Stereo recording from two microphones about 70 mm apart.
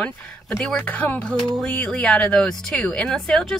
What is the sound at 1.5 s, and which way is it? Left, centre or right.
Speech, centre.